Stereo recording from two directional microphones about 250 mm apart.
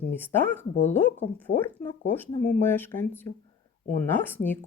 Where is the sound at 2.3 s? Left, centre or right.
Left.